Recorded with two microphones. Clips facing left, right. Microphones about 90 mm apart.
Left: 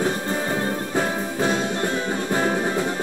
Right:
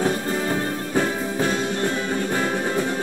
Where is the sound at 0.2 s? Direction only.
30° left (ahead or behind).